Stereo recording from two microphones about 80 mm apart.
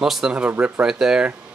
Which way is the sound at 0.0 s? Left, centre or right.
Centre.